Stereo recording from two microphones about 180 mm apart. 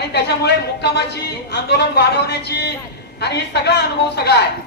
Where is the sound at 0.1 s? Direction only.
65° left (ahead or behind).